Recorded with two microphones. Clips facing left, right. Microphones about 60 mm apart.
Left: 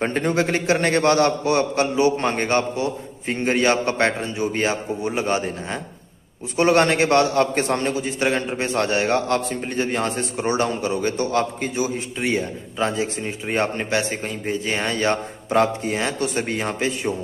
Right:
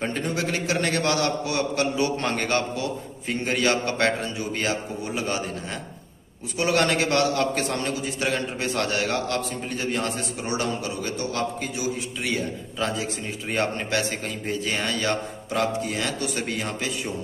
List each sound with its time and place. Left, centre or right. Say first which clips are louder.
0.0 s a man's voice: left 6 dB; left
2.0 s a man's voice: left 5 dB; left